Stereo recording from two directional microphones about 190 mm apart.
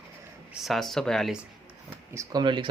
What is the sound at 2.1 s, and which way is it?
Speech, 15° right (ahead or behind).